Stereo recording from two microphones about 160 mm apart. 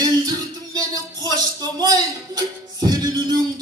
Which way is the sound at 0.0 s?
25° right (ahead or behind).